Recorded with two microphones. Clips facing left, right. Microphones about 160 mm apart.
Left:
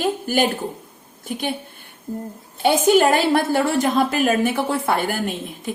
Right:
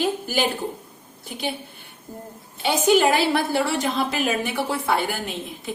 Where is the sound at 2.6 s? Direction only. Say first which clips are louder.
Left 3 dB; 50° left (ahead or behind).